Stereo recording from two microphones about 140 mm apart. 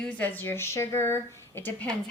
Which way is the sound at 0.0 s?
10° left (ahead or behind).